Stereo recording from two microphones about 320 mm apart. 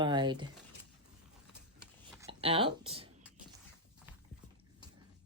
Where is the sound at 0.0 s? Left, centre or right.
Centre.